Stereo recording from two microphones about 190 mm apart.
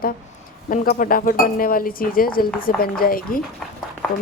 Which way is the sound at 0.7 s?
45° left (ahead or behind).